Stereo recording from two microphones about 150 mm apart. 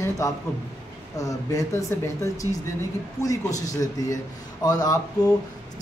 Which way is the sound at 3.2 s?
25° left (ahead or behind).